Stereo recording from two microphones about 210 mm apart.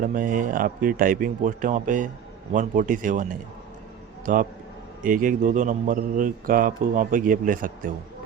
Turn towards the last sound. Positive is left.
turn(degrees=-40)  # may be behind; listen again after turning